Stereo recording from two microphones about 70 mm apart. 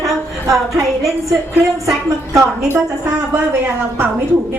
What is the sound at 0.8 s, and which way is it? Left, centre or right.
Speech, right.